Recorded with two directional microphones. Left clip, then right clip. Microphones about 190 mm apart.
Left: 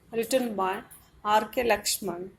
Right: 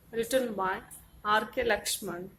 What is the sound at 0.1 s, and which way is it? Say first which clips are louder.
A woman's voice: left 2 dB; 15° left (ahead or behind).